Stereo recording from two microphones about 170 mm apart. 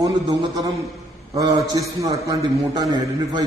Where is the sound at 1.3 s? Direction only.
20° right (ahead or behind).